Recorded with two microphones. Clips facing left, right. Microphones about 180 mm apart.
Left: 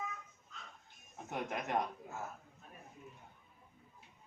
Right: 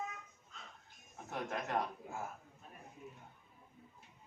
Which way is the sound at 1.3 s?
20° left (ahead or behind).